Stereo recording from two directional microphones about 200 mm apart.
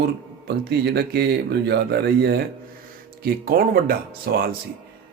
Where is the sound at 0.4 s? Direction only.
55° right (ahead or behind).